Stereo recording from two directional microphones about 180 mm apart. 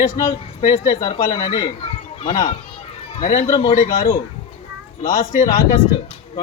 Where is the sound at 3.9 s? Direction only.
20° left (ahead or behind).